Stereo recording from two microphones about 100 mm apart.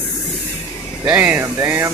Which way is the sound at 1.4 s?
25° right (ahead or behind).